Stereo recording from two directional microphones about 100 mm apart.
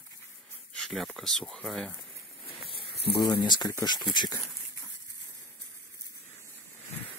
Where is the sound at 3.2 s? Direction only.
45° left (ahead or behind).